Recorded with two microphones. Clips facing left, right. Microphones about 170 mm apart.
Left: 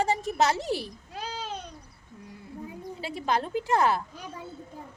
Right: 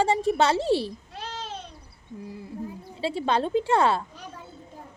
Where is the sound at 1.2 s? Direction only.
10° left (ahead or behind).